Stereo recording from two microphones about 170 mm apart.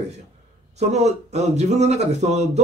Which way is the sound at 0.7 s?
40° right (ahead or behind).